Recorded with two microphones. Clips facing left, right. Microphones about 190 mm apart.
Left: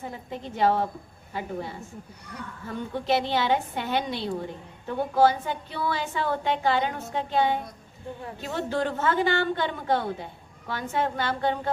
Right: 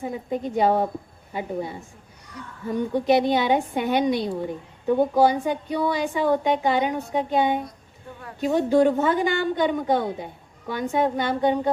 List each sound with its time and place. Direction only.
0.0 s a woman's voice: 15° right (ahead or behind)